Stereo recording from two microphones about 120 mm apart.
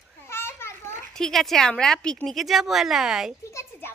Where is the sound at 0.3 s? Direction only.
20° left (ahead or behind).